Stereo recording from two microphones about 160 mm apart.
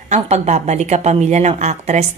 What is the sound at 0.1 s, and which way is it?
A woman's voice, 45° right (ahead or behind).